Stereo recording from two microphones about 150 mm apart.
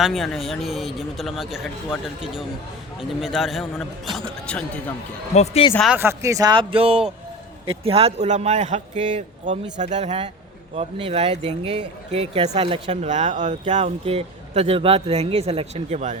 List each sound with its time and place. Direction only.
0.0 s a man's voice: centre (ahead or behind)
5.3 s speech: 45° left (ahead or behind)
6.0 s speech: 20° right (ahead or behind); by 16.1 s 50° right (ahead or behind)